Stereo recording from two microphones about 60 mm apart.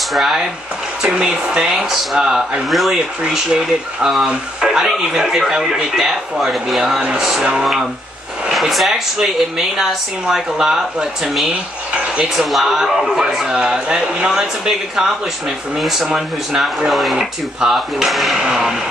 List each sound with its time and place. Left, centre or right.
0.1 s speech: centre
1.0 s speech: centre
2.7 s speech: centre
3.3 s speech: centre
11.9 s a sound: centre
12.4 s speech: centre